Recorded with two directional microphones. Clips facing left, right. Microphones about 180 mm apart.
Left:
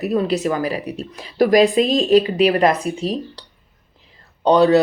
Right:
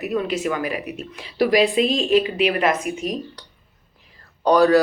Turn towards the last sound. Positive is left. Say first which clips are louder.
# left 2 dB
turn(degrees=25)  # may be behind; listen again after turning